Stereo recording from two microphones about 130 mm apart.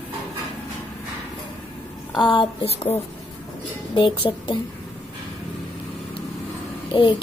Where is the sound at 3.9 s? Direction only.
40° left (ahead or behind).